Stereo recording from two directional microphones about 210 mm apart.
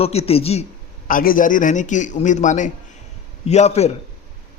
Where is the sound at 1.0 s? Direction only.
40° left (ahead or behind).